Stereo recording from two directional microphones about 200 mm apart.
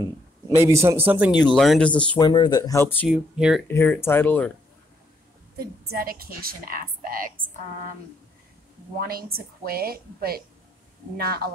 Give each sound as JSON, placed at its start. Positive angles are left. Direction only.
{"t": 0.6, "sound": "speech", "side_deg": -15}
{"t": 1.4, "sound": "speech", "side_deg": 0}
{"t": 2.1, "sound": "speech", "side_deg": 20}
{"t": 3.1, "sound": "speech", "side_deg": -5}
{"t": 3.6, "sound": "speech", "side_deg": 10}
{"t": 5.6, "sound": "a woman's voice", "side_deg": -50}
{"t": 9.0, "sound": "a woman's voice", "side_deg": -50}